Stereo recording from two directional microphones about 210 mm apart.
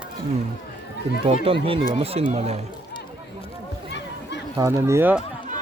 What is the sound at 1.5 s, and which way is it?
Speech, 25° right (ahead or behind).